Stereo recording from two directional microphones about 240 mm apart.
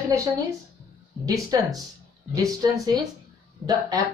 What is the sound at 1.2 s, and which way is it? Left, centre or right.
Speech, centre.